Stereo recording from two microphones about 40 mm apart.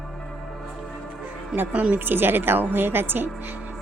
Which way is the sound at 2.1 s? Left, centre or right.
Right.